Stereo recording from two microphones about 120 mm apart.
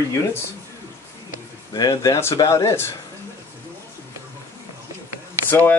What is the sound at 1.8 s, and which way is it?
Speech, 30° left (ahead or behind).